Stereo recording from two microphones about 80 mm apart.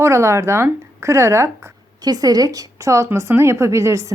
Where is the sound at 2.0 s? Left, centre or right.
Right.